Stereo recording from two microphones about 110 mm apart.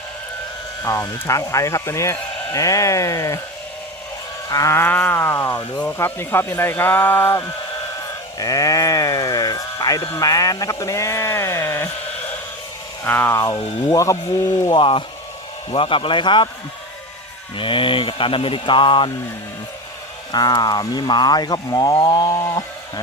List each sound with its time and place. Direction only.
0.9 s speech: 30° left (ahead or behind)
4.4 s speech: 30° left (ahead or behind)
8.4 s speech: 35° left (ahead or behind)
13.1 s speech: 20° left (ahead or behind)
14.7 s speech: 50° left (ahead or behind)
17.6 s speech: 50° left (ahead or behind)
20.3 s speech: 40° left (ahead or behind)